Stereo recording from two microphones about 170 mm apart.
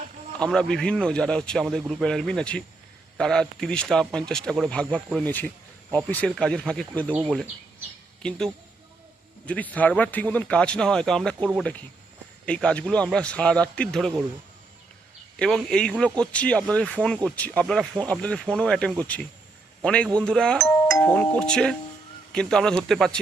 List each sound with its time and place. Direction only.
0.3 s a man's voice: 5° left (ahead or behind)
7.2 s a man's voice: 5° right (ahead or behind)
8.2 s a man's voice: 5° left (ahead or behind)
9.5 s speech: 10° left (ahead or behind)
15.4 s a man's voice: 5° left (ahead or behind)
20.7 s music: 20° left (ahead or behind)
21.0 s a man's voice: 5° left (ahead or behind)